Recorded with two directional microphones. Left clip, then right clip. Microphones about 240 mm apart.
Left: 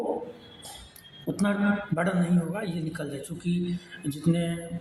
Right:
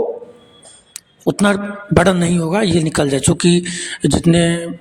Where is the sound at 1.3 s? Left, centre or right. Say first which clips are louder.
Right 11 dB; right.